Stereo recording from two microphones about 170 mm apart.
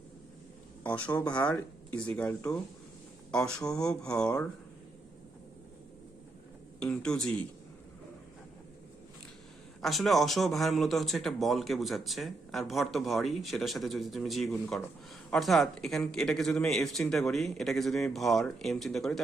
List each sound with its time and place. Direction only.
0.9 s speech: 10° left (ahead or behind)
6.7 s speech: 5° left (ahead or behind)
9.8 s speech: centre (ahead or behind)